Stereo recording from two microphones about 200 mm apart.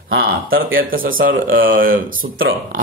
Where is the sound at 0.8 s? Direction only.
45° right (ahead or behind).